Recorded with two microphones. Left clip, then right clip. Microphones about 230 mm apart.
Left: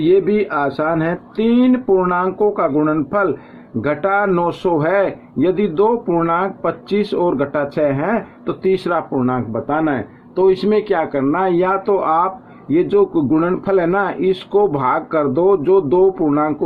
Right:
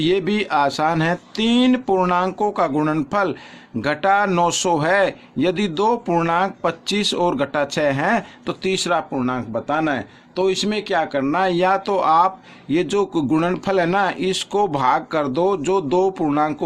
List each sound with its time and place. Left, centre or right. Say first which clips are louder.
0.0 s speech: left 6 dB; right